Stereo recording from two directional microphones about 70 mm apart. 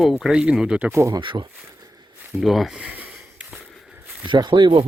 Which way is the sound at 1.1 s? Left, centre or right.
Right.